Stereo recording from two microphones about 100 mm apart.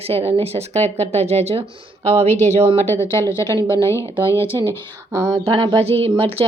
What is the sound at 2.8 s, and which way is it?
Speech, 25° left (ahead or behind).